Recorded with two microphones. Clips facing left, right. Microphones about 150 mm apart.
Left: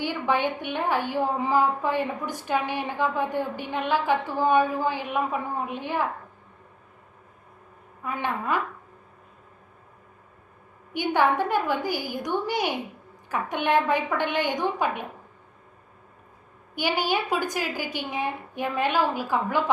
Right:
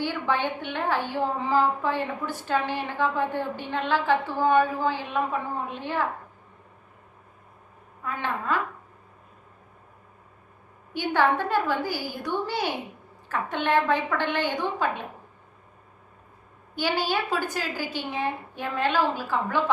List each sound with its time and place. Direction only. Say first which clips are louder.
0.0 s a woman's voice: left 1 dB; 15° left (ahead or behind)
8.0 s a woman's voice: left 1 dB; 15° left (ahead or behind)
10.9 s a woman's voice: left 1 dB; 15° left (ahead or behind)
16.7 s a woman's voice: left 1 dB; 15° left (ahead or behind)